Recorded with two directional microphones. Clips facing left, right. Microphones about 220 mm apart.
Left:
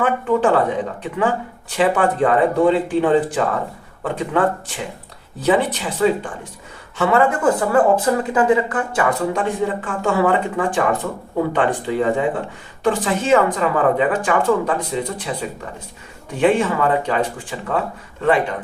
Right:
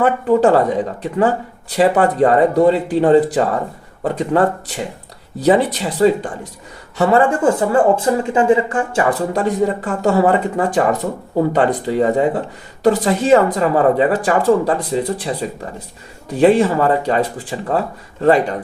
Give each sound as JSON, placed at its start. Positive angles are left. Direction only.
{"t": 0.0, "sound": "speech", "side_deg": -40}
{"t": 1.7, "sound": "speech", "side_deg": -40}